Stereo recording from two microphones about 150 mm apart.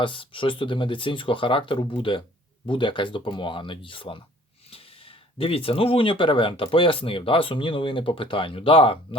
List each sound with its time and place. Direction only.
0.0 s speech: 35° left (ahead or behind)